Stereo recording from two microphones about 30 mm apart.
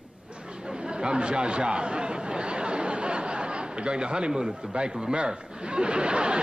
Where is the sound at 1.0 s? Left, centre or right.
Right.